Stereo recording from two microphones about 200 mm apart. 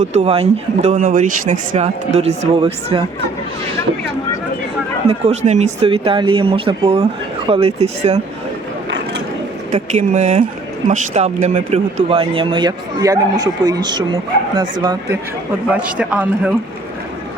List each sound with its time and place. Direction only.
0.0 s speech: 35° right (ahead or behind)
5.0 s speech: 35° right (ahead or behind)
9.7 s speech: 35° right (ahead or behind); by 15.2 s 20° right (ahead or behind)
15.7 s a man's voice: 5° right (ahead or behind)